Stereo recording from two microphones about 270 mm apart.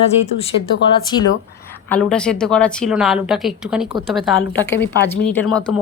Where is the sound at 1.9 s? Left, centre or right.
Centre.